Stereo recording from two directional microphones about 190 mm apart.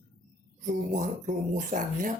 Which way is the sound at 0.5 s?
45° right (ahead or behind).